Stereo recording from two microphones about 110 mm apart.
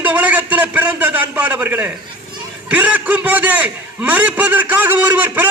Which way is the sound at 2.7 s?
15° right (ahead or behind).